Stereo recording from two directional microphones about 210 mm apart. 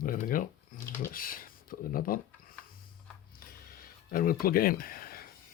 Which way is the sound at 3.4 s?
45° left (ahead or behind).